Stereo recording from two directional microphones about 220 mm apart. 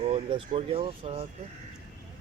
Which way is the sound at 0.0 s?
25° right (ahead or behind).